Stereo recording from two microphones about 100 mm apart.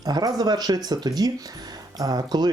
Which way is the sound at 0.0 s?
40° right (ahead or behind).